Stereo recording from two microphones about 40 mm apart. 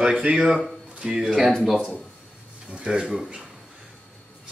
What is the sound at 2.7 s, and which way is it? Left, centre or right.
Speech, right.